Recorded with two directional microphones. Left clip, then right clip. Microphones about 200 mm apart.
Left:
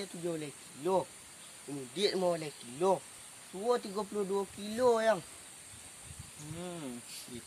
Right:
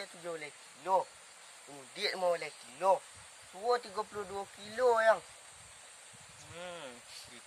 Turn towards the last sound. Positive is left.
turn(degrees=-20)  # may be behind; listen again after turning